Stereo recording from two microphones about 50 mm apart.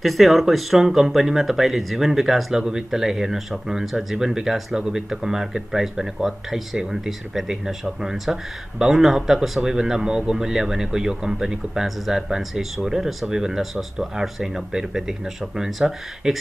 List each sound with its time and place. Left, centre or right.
0.0 s speech: centre